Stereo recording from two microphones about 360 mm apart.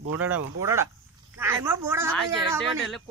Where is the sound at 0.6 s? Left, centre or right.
Centre.